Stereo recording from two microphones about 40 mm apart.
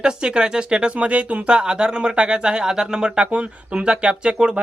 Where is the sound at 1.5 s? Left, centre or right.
Right.